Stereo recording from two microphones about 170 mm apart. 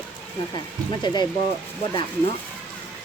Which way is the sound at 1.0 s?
25° left (ahead or behind).